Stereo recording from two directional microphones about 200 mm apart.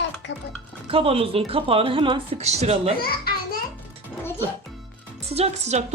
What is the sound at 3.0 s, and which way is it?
Children playing, 50° left (ahead or behind).